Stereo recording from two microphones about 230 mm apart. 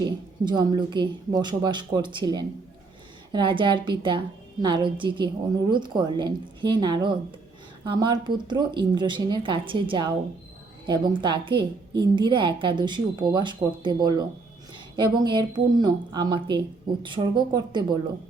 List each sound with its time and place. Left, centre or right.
0.4 s a woman's voice: centre